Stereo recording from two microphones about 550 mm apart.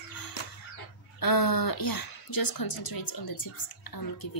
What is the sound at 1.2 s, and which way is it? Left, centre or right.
A woman's voice, left.